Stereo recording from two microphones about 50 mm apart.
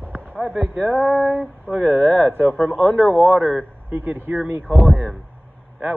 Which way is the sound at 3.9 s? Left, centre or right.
Right.